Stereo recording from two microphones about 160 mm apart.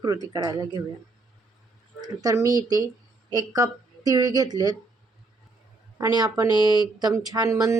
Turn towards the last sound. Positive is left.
turn(degrees=-20)  # may be behind; listen again after turning